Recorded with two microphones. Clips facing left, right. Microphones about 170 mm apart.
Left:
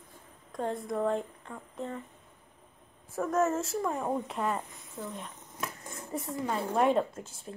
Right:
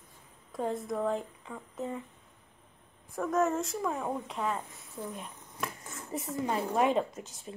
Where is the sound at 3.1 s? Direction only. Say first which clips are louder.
Left 1 dB; centre (ahead or behind).